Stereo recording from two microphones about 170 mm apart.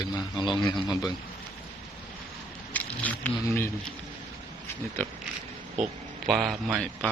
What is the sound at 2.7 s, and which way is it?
Speech, 10° left (ahead or behind).